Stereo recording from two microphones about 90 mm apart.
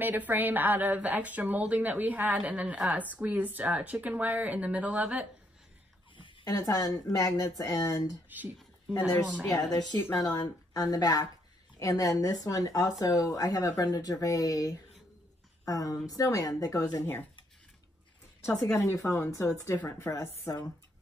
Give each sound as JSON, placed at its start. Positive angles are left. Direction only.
{"t": 0.0, "sound": "a woman's voice", "side_deg": -20}
{"t": 6.4, "sound": "speech", "side_deg": 40}
{"t": 9.5, "sound": "speech", "side_deg": 50}
{"t": 17.0, "sound": "speech", "side_deg": 25}
{"t": 18.7, "sound": "speech", "side_deg": 35}